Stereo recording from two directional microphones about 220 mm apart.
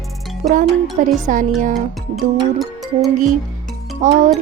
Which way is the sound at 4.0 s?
35° right (ahead or behind).